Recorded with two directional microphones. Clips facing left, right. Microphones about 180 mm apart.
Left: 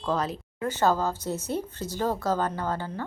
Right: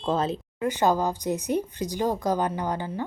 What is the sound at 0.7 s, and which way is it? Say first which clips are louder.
Speech: right 1 dB; 15° right (ahead or behind).